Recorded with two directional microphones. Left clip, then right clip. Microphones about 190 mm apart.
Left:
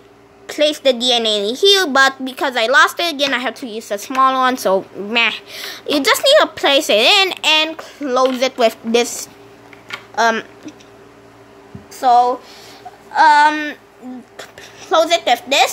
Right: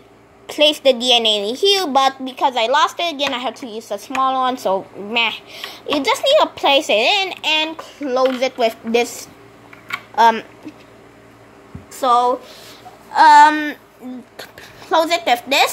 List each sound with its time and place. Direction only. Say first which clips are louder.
0.5 s a woman's voice: right 1 dB; 10° left (ahead or behind)
11.9 s a woman's voice: left 3 dB; centre (ahead or behind)
13.1 s a sound: right 2 dB; 5° right (ahead or behind)
14.3 s speech: left 1 dB; centre (ahead or behind)